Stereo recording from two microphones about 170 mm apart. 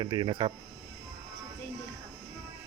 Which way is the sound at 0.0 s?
25° right (ahead or behind).